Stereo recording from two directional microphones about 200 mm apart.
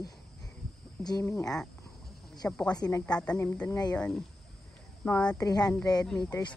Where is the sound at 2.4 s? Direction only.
5° left (ahead or behind).